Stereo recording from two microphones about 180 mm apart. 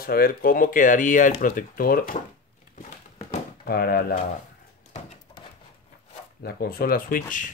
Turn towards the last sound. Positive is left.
turn(degrees=50)  # may be behind; listen again after turning